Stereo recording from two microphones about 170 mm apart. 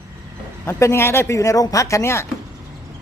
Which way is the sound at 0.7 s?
15° left (ahead or behind).